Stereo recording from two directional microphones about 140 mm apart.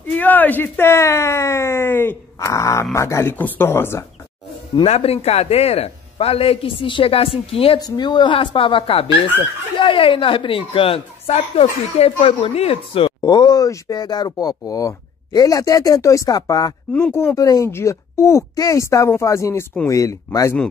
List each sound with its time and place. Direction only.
0.1 s speech: 10° left (ahead or behind)
4.8 s a man's voice: 50° left (ahead or behind)
7.8 s speech: 30° left (ahead or behind)
16.9 s a woman's voice: 15° left (ahead or behind)